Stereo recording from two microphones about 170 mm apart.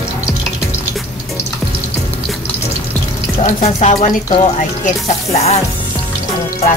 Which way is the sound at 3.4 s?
40° left (ahead or behind).